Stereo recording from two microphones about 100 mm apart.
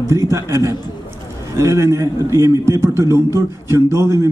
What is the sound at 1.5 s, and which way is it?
A man's voice, 30° right (ahead or behind).